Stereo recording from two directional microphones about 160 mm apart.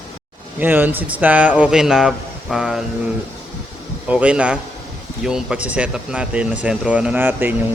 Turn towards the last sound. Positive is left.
turn(degrees=-10)  # may be behind; listen again after turning